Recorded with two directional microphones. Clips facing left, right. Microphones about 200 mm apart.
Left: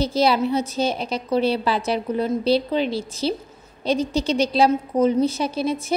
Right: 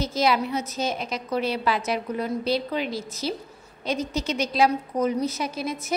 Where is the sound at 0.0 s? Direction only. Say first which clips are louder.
Left 4 dB; 30° left (ahead or behind).